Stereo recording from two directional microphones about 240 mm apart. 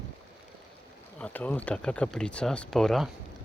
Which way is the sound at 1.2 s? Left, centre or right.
Centre.